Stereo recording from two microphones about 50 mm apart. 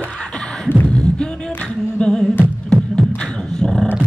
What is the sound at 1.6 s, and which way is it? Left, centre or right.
Singing, left.